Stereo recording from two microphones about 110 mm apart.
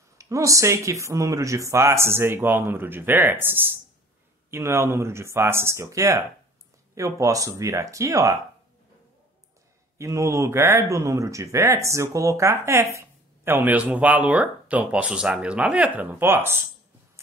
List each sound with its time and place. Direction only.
0.2 s speech: 30° right (ahead or behind)
9.9 s speech: 30° right (ahead or behind)